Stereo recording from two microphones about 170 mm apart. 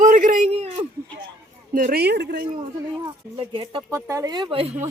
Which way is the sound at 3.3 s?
30° right (ahead or behind).